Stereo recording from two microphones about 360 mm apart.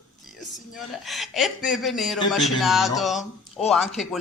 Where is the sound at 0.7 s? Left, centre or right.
Centre.